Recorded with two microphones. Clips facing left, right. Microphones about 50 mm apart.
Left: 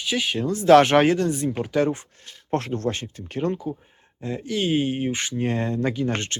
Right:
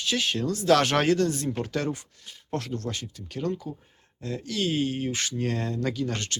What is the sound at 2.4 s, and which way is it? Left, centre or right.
Speech, left.